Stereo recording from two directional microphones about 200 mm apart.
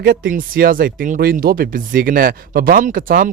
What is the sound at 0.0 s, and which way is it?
Speech, 45° right (ahead or behind).